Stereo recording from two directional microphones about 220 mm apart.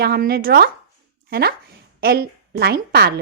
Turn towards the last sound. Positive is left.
turn(degrees=-45)  # may be behind; listen again after turning